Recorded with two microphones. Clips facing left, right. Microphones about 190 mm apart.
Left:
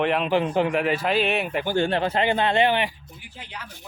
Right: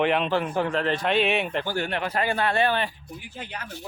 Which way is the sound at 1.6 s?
25° left (ahead or behind).